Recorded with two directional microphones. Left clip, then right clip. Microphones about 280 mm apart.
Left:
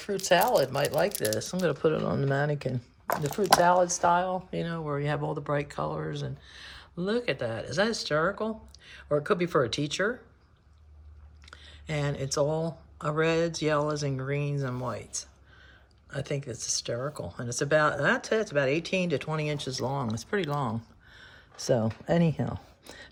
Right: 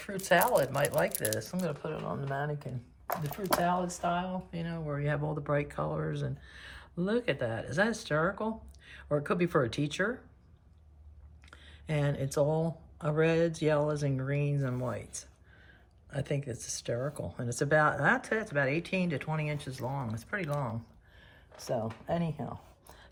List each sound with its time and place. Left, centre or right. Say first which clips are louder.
0.0 s speech: left 3 dB; centre
2.0 s speech: left 7 dB; left
3.8 s speech: left 8 dB; centre
11.5 s speech: left 1 dB; centre
22.2 s speech: left 8 dB; left